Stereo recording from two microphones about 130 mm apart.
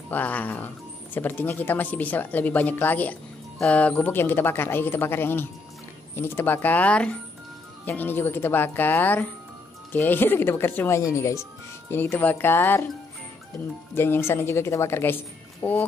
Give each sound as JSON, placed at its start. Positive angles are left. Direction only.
{"t": 0.1, "sound": "speech", "side_deg": 10}
{"t": 13.9, "sound": "speech", "side_deg": 15}